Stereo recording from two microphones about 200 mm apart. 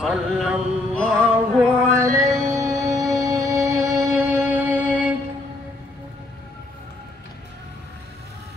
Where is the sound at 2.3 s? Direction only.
15° right (ahead or behind).